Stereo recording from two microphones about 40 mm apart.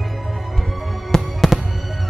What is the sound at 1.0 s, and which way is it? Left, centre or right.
Fireworks, centre.